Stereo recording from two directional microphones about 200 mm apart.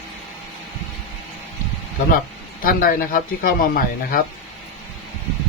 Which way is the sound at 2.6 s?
45° left (ahead or behind).